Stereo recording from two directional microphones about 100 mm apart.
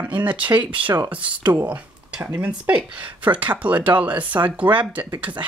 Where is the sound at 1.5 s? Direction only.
15° right (ahead or behind).